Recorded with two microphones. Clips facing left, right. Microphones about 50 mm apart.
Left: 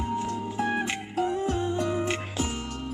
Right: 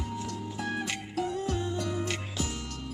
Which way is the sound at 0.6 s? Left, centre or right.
Left.